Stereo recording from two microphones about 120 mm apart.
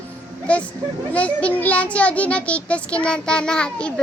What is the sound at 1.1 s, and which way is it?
A child's voice, 10° left (ahead or behind).